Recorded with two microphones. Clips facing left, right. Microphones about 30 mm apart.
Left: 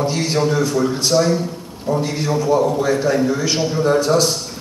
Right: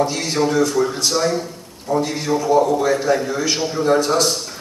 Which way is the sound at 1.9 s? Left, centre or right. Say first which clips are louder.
Even; left.